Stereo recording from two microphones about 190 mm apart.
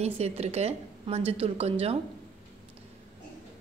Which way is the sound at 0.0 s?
35° right (ahead or behind).